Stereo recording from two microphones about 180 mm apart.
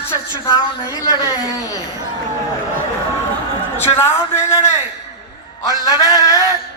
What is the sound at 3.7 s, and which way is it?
Speech, 15° left (ahead or behind).